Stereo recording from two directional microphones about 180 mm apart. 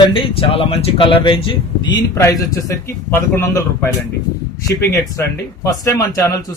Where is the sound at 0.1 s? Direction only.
30° left (ahead or behind); by 3.5 s 15° left (ahead or behind).